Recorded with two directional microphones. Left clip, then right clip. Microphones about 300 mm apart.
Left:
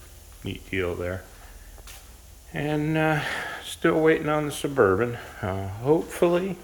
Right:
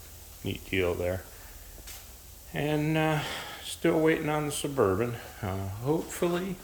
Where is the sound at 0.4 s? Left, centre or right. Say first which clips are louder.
Even; centre.